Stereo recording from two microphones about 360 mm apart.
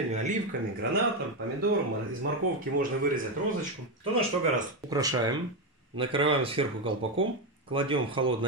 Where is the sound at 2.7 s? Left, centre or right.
Right.